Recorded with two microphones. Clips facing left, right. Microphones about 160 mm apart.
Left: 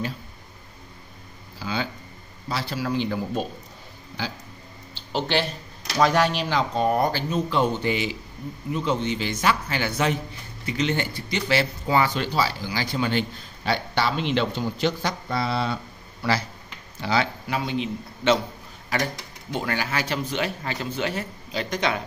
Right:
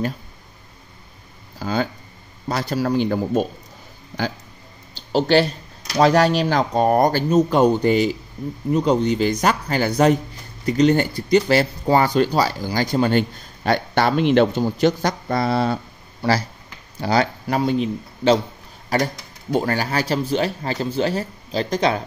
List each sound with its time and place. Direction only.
1.6 s speech: 45° right (ahead or behind)
5.9 s speech: 35° right (ahead or behind)